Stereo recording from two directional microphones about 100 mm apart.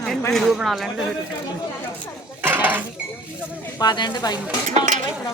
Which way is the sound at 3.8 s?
45° left (ahead or behind).